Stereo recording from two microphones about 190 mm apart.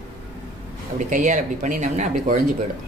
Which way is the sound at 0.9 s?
40° right (ahead or behind).